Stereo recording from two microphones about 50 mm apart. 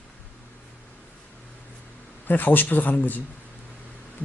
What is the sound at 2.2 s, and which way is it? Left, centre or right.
Speech, left.